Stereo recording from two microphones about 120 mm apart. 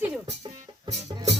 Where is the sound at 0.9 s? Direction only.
65° right (ahead or behind).